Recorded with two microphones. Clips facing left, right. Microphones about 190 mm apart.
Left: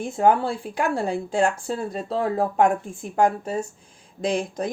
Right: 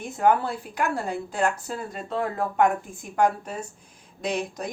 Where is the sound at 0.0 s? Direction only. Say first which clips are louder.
Left 2 dB; 30° left (ahead or behind).